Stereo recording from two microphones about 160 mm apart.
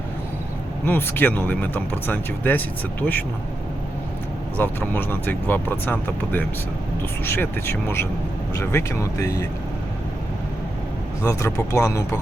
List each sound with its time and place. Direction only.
0.9 s speech: 10° left (ahead or behind)
4.5 s speech: 10° left (ahead or behind)
11.3 s speech: 15° left (ahead or behind)